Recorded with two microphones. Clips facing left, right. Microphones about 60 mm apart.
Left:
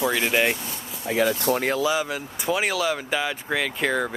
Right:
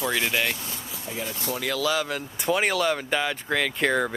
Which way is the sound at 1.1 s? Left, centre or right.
Left.